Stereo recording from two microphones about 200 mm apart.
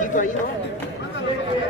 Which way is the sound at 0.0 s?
40° left (ahead or behind).